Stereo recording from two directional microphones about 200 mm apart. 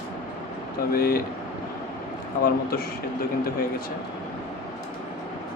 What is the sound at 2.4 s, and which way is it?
Speech, 50° left (ahead or behind).